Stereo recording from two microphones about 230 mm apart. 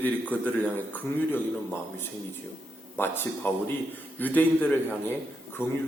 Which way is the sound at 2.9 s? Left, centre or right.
Centre.